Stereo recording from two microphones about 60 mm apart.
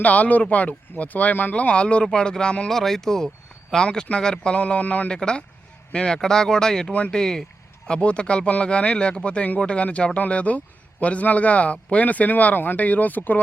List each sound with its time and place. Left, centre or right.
0.0 s speech: left; by 6.9 s centre
6.9 s speech: left
7.2 s speech: centre; by 13.4 s left